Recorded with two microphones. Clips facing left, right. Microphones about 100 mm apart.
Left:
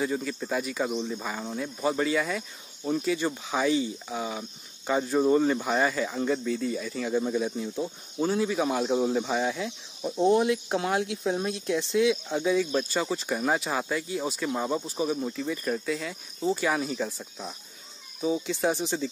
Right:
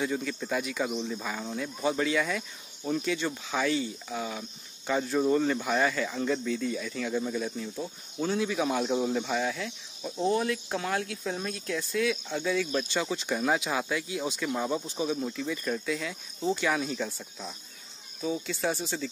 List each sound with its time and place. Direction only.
0.0 s speech: 5° left (ahead or behind)
7.2 s speech: 15° left (ahead or behind)